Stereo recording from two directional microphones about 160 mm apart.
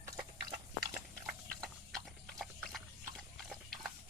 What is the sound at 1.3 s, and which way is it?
Horse, 5° left (ahead or behind).